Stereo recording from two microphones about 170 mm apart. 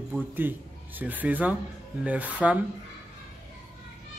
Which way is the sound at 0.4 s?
10° right (ahead or behind).